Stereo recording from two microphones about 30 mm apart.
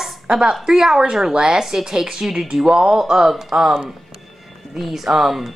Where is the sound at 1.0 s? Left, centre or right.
Right.